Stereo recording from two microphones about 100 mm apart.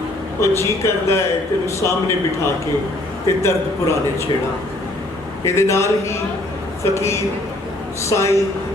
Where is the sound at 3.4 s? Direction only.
30° left (ahead or behind).